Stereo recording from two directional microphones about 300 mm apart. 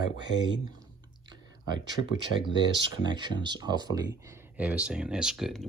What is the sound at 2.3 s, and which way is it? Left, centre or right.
Speech, left.